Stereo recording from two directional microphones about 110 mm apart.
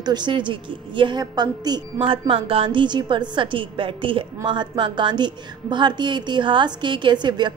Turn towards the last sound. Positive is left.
turn(degrees=-45)  # may be behind; listen again after turning